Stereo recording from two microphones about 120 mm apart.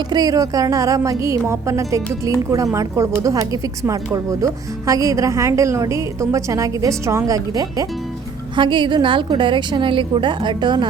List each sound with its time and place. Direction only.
0.1 s speech: 30° right (ahead or behind)
8.5 s a woman's voice: 40° right (ahead or behind)